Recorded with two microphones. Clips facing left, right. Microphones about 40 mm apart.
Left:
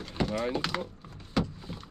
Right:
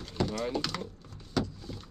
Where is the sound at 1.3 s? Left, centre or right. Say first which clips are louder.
Left 1 dB; left.